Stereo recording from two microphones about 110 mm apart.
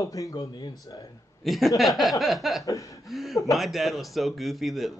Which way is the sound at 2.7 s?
30° left (ahead or behind).